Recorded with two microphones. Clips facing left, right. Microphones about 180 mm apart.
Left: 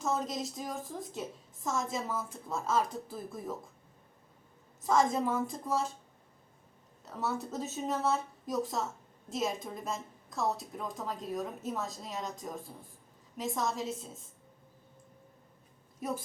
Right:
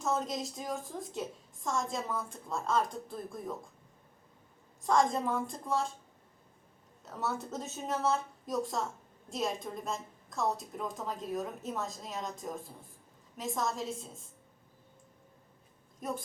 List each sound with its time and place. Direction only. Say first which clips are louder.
0.0 s a woman's voice: even; centre (ahead or behind)
4.8 s a woman's voice: even; centre (ahead or behind)
7.0 s a woman's voice: left 1 dB; centre (ahead or behind)
16.0 s a woman's voice: left 1 dB; 5° left (ahead or behind)